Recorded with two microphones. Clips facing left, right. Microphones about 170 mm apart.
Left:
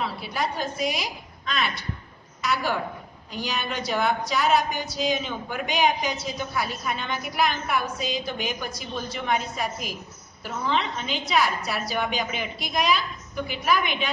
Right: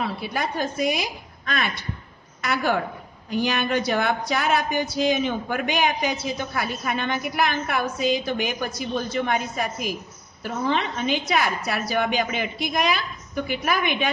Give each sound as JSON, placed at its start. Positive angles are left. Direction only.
{"t": 0.0, "sound": "a woman's voice", "side_deg": -50}
{"t": 10.7, "sound": "speech", "side_deg": -50}